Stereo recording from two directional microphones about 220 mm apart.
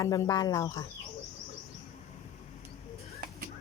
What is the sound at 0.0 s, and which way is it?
Speech, 15° left (ahead or behind).